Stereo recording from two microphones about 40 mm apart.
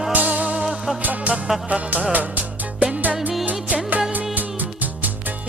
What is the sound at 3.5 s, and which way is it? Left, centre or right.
Music, right.